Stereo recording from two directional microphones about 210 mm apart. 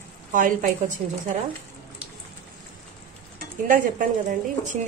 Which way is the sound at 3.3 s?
40° right (ahead or behind).